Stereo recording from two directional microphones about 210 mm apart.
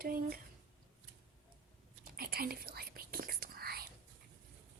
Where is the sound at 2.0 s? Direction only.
45° right (ahead or behind).